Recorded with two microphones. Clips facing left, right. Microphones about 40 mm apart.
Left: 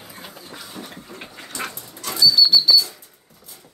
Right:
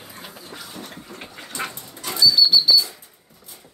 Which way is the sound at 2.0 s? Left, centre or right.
Right.